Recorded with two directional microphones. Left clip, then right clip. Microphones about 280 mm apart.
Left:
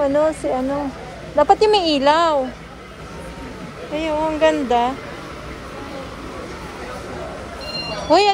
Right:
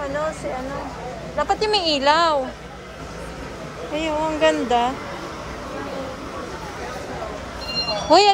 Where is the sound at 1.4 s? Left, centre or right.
Centre.